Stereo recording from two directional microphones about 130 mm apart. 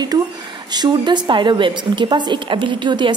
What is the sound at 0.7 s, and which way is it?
A woman's voice, 35° right (ahead or behind).